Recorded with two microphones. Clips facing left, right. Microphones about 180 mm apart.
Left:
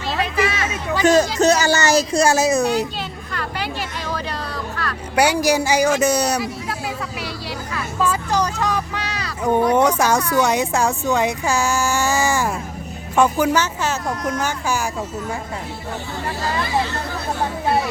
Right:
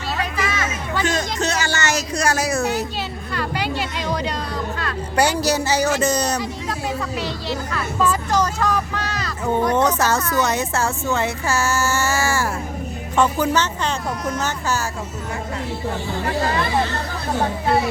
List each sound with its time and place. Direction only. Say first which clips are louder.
0.2 s a sound: left 5 dB; 30° left (ahead or behind)
1.0 s speech: left 10 dB; 40° left (ahead or behind); by 2.8 s 15° left (ahead or behind)
5.1 s speech: left 2 dB; 10° left (ahead or behind)